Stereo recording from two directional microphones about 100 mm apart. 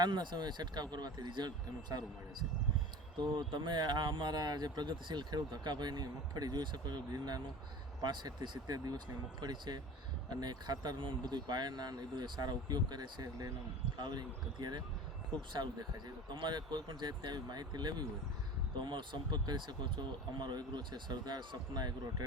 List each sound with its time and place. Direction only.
0.0 s speech: 50° right (ahead or behind)
3.2 s speech: 50° right (ahead or behind)